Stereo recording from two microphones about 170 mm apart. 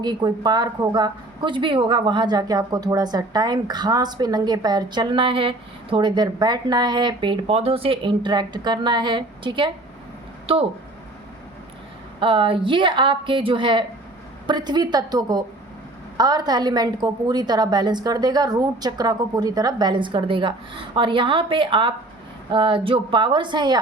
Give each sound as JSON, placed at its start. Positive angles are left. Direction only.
{"t": 0.0, "sound": "a woman's voice", "side_deg": -25}
{"t": 12.2, "sound": "a woman's voice", "side_deg": -30}